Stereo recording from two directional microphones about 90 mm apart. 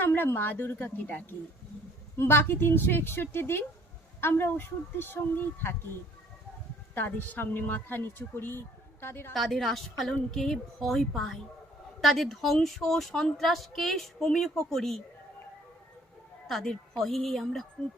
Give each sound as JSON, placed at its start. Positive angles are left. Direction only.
{"t": 0.0, "sound": "speech", "side_deg": 25}
{"t": 6.9, "sound": "speech", "side_deg": 20}
{"t": 9.3, "sound": "speech", "side_deg": 0}
{"t": 16.5, "sound": "speech", "side_deg": 0}